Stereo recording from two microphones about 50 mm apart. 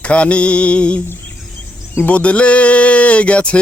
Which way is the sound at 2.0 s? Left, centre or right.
Left.